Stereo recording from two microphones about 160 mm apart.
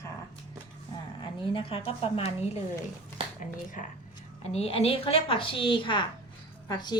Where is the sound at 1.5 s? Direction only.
35° left (ahead or behind).